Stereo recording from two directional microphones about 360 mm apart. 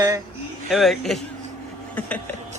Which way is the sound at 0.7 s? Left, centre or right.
Centre.